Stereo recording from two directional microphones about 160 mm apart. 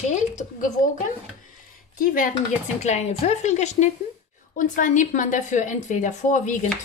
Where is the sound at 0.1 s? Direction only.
50° left (ahead or behind).